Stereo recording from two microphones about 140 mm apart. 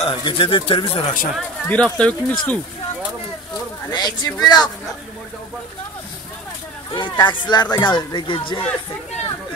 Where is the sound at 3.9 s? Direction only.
30° left (ahead or behind).